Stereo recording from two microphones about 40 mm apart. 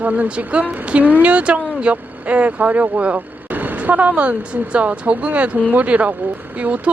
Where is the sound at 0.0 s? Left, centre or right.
Right.